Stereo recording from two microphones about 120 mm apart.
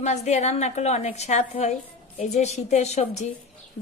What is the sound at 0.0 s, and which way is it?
Speech, 75° left (ahead or behind).